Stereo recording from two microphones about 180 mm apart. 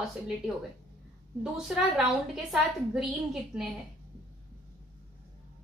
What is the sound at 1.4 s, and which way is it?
A woman's voice, centre (ahead or behind).